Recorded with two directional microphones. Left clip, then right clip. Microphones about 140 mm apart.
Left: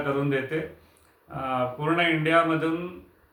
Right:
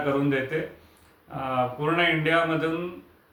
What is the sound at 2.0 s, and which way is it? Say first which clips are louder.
Speech: left 1 dB; 25° left (ahead or behind).